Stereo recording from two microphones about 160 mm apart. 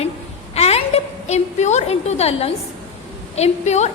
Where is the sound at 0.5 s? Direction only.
40° left (ahead or behind).